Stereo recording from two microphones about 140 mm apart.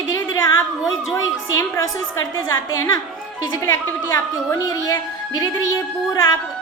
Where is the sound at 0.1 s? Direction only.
25° left (ahead or behind).